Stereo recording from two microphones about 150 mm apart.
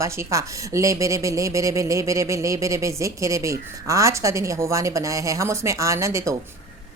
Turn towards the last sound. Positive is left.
turn(degrees=-20)  # may be behind; listen again after turning